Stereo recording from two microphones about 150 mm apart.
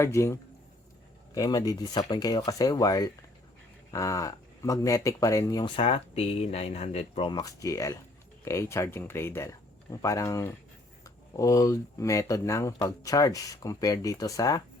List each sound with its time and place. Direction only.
0.0 s a man's voice: 20° left (ahead or behind); by 7.3 s 45° left (ahead or behind)
7.3 s speech: 25° left (ahead or behind)